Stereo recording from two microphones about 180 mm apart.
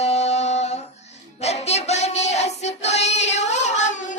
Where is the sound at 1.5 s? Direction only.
35° left (ahead or behind).